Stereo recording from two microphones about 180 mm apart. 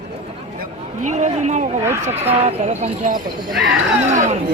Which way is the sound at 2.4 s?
35° right (ahead or behind).